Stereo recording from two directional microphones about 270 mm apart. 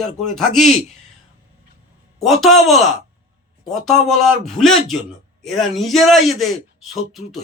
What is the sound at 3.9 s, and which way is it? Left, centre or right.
A man's voice, centre.